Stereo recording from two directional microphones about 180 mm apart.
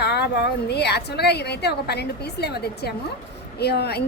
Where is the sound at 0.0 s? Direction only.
65° left (ahead or behind).